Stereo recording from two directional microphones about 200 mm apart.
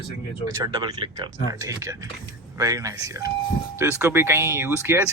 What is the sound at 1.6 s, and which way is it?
Speech, 15° right (ahead or behind).